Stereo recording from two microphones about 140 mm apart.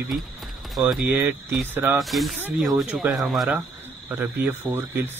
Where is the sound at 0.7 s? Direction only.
Centre (ahead or behind).